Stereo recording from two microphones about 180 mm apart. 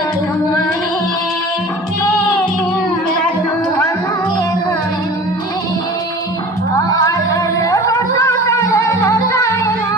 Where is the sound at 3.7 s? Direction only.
15° left (ahead or behind).